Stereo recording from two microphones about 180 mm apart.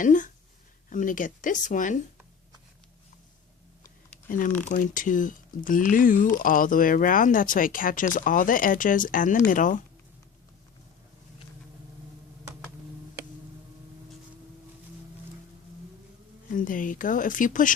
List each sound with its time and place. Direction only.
0.0 s speech: 45° left (ahead or behind)
4.3 s speech: 45° left (ahead or behind)
16.5 s speech: 45° left (ahead or behind)